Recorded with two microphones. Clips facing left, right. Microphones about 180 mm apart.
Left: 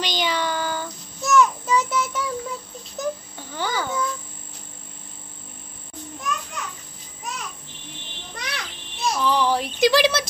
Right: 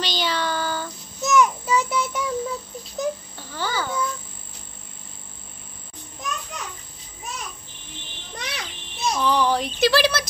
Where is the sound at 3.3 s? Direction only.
15° left (ahead or behind).